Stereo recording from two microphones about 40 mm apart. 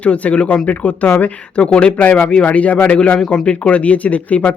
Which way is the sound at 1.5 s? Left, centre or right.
Left.